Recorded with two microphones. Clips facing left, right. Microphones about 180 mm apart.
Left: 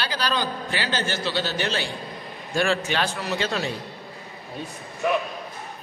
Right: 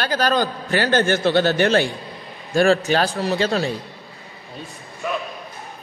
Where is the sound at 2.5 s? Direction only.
40° right (ahead or behind).